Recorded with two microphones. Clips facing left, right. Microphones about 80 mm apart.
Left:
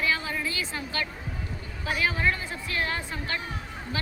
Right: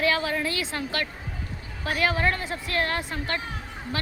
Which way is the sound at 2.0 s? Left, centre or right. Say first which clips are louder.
Right 3 dB; right.